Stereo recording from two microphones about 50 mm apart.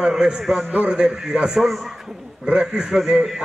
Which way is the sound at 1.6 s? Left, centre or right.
Centre.